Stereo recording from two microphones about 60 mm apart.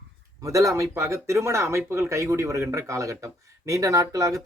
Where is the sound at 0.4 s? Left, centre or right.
Right.